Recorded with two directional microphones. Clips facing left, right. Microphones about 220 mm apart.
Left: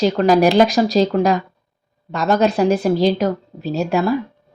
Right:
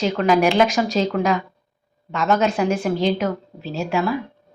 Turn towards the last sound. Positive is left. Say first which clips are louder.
# left 4 dB
turn(degrees=40)  # may be behind; listen again after turning